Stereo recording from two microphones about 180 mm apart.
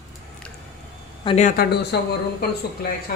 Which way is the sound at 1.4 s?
60° left (ahead or behind).